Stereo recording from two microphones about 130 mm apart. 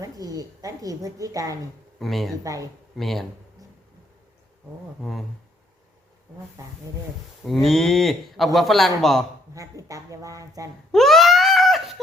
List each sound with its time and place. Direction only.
0.0 s a woman's voice: 30° right (ahead or behind)
2.0 s speech: centre (ahead or behind)
2.3 s a woman's voice: 25° right (ahead or behind)
3.0 s speech: centre (ahead or behind)
7.4 s speech: centre (ahead or behind)
9.6 s a woman's voice: 25° right (ahead or behind)
10.9 s screaming: centre (ahead or behind)